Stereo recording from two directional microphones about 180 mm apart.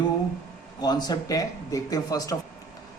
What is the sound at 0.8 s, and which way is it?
A man's voice, 20° left (ahead or behind).